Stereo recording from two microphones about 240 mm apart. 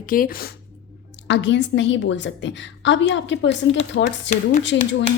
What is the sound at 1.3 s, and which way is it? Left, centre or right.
A woman's voice, left.